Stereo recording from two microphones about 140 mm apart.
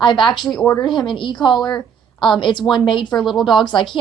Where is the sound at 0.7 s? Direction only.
35° left (ahead or behind).